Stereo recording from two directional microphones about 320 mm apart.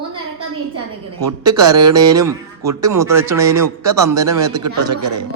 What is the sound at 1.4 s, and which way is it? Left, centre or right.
Speech, centre.